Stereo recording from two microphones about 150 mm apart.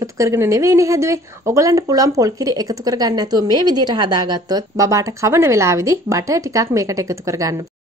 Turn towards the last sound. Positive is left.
turn(degrees=-20)  # may be behind; listen again after turning